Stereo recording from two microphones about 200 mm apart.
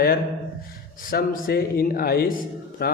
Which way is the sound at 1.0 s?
45° left (ahead or behind).